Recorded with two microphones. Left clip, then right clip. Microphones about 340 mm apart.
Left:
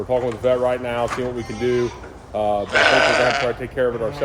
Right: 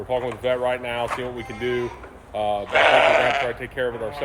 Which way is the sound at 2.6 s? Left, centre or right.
Centre.